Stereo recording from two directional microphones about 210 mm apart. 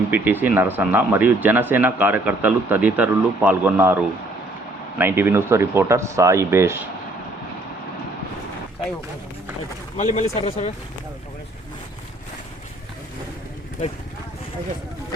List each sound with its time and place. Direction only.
0.1 s speech: 10° right (ahead or behind)
10.2 s speech: 30° left (ahead or behind)